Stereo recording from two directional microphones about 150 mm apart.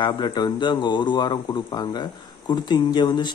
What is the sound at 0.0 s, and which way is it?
Speech, 30° left (ahead or behind).